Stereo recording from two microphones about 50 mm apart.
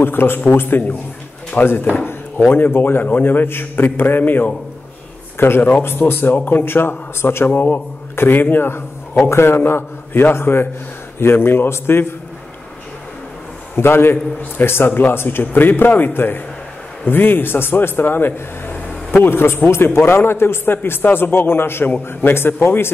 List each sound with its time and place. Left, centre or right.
0.0 s a man's voice: left
6.3 s speech: left
6.6 s a man's voice: left
7.4 s a man's voice: left
13.7 s a man's voice: left